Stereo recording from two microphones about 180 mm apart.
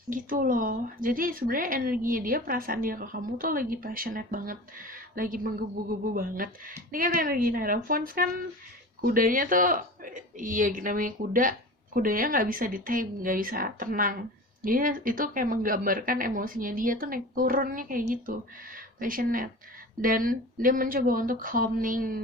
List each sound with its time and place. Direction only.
0.1 s speech: 50° right (ahead or behind)